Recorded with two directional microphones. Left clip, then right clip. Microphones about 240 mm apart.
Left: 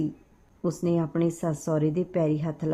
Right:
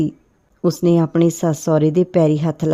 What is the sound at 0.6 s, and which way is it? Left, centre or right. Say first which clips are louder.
Speech: right 11 dB; right.